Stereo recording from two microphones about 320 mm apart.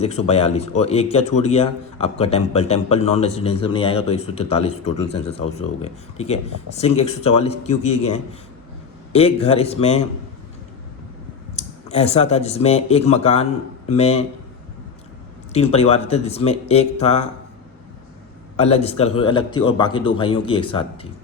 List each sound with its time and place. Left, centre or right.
0.0 s a man's voice: centre
11.5 s speech: centre
15.5 s a man's voice: centre
18.5 s a man's voice: centre